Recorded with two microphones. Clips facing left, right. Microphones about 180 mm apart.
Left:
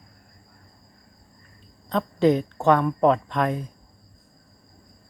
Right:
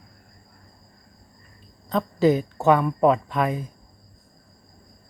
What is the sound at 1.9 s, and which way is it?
A woman's voice, centre (ahead or behind).